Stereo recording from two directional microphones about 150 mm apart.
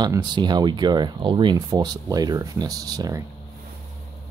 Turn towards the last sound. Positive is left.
turn(degrees=-25)  # may be behind; listen again after turning